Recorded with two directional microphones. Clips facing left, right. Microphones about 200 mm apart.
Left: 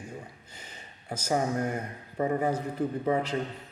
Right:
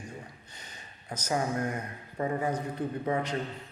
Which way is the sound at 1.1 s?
10° left (ahead or behind).